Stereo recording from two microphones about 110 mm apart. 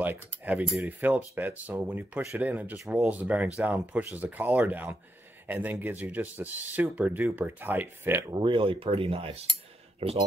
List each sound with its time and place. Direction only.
0.0 s cutlery: 15° right (ahead or behind)
0.8 s speech: 15° right (ahead or behind)
8.4 s speech: 50° right (ahead or behind)